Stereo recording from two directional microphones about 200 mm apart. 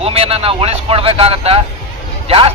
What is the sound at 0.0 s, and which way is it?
A man's voice, 30° right (ahead or behind).